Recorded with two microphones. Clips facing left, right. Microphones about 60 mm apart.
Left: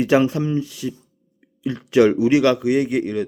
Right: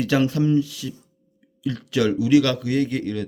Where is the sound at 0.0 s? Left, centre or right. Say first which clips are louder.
Left 3 dB; left.